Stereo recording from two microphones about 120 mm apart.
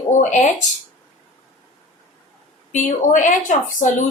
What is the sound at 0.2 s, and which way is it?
Speech, 90° left.